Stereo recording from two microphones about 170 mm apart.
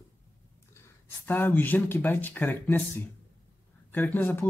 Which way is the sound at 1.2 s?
10° left (ahead or behind).